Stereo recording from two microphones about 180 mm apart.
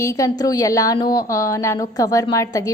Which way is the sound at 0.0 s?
15° left (ahead or behind).